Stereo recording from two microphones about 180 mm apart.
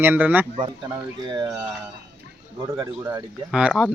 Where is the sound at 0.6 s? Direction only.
20° right (ahead or behind).